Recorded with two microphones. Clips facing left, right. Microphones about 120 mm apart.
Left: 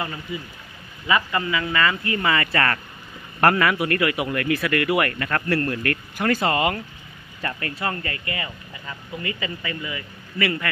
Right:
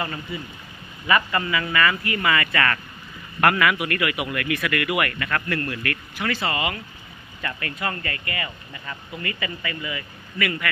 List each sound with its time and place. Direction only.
0.0 s speech: 15° left (ahead or behind); by 6.8 s 45° left (ahead or behind)
7.4 s speech: 30° left (ahead or behind)